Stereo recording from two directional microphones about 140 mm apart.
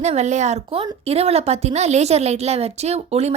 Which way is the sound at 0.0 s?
55° right (ahead or behind).